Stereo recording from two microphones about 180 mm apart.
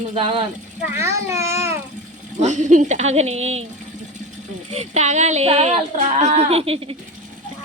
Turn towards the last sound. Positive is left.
turn(degrees=-30)  # may be behind; listen again after turning